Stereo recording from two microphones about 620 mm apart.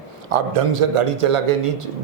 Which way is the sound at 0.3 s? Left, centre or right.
Right.